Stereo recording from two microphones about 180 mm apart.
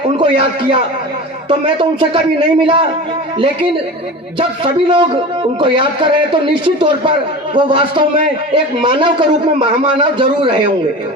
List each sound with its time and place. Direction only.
0.2 s a man's voice: 30° right (ahead or behind)